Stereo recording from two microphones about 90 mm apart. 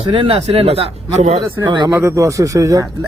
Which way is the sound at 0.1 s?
80° right.